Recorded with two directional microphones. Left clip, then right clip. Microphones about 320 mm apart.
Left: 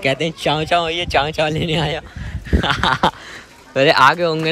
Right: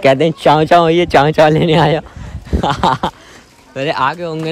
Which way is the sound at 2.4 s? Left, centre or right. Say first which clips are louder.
Right 3 dB; centre.